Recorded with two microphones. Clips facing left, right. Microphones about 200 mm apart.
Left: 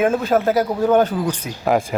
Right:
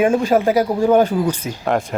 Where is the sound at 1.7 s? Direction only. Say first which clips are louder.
Left 2 dB; centre (ahead or behind).